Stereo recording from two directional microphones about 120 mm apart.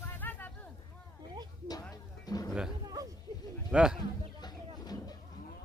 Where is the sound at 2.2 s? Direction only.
30° left (ahead or behind).